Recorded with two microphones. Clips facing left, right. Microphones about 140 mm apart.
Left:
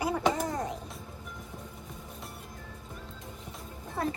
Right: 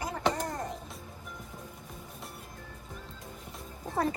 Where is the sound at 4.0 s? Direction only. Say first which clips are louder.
Right 2 dB; 40° right (ahead or behind).